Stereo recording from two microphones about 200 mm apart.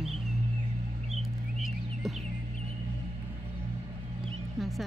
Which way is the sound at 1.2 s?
Centre (ahead or behind).